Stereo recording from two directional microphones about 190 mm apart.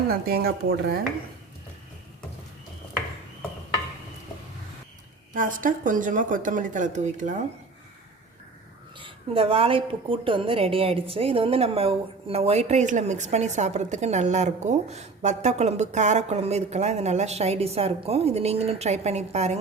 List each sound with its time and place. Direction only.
0.1 s speech: 55° right (ahead or behind)
5.3 s speech: 45° right (ahead or behind)
9.0 s a woman's voice: 30° right (ahead or behind)